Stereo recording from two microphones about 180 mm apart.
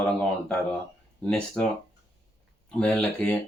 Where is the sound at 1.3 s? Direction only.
5° left (ahead or behind).